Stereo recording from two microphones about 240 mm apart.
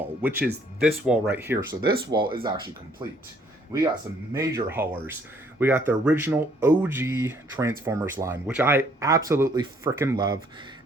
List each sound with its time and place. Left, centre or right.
0.2 s speech: centre
4.4 s speech: centre